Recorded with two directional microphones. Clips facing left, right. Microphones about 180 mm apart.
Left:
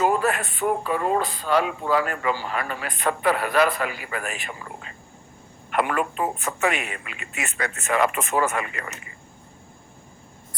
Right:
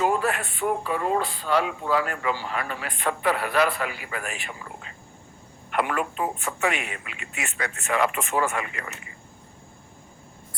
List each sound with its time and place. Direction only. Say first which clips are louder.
0.0 s speech: left 2 dB; 45° left (ahead or behind)
5.7 s speech: left 2 dB; 50° left (ahead or behind)